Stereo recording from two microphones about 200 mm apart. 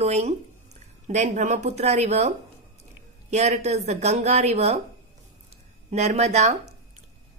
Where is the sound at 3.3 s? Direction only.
35° right (ahead or behind).